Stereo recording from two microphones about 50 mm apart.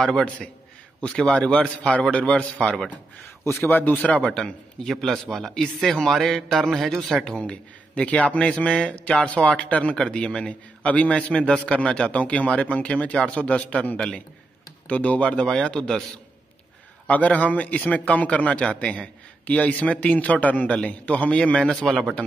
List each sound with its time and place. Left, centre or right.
0.0 s a man's voice: centre
3.4 s speech: left
5.0 s a man's voice: centre
7.3 s a man's voice: left
15.3 s a man's voice: centre
17.1 s a man's voice: left